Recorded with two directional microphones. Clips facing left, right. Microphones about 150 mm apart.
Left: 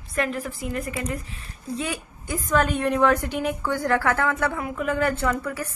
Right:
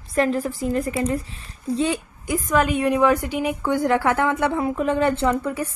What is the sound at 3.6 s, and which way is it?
A woman's voice, 20° right (ahead or behind).